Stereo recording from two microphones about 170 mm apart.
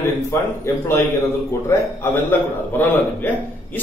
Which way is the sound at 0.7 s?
15° left (ahead or behind).